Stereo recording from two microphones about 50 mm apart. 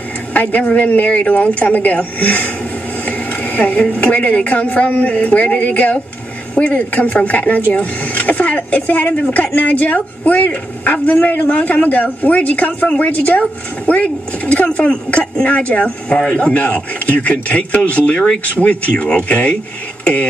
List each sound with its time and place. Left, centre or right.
0.3 s a woman's voice: left